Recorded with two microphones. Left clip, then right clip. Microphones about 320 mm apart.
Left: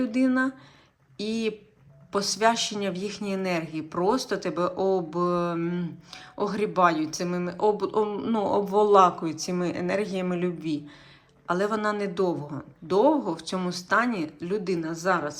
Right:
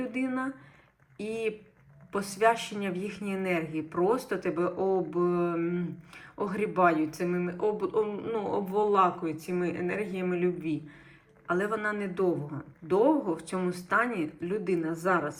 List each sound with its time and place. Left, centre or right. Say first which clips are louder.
0.0 s speech: left 7 dB; centre